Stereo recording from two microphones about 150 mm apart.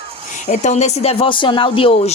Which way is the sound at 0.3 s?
55° left (ahead or behind).